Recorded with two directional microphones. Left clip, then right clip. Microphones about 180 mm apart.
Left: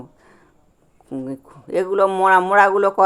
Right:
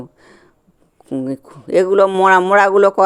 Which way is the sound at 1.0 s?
30° right (ahead or behind).